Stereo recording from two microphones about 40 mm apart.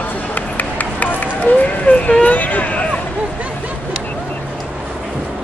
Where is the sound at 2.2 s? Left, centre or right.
Left.